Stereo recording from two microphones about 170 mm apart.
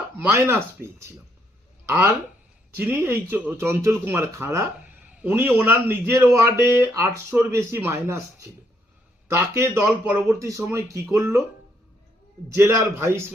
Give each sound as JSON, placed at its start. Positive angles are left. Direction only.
{"t": 0.3, "sound": "a man's voice", "side_deg": -15}
{"t": 12.5, "sound": "a man's voice", "side_deg": -15}